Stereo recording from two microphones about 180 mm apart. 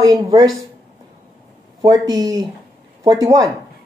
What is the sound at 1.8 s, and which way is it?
Speech, 20° right (ahead or behind).